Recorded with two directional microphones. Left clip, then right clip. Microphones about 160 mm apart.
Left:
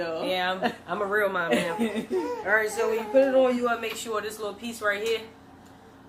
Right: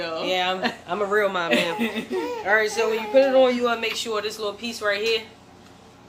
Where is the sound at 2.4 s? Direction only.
15° right (ahead or behind).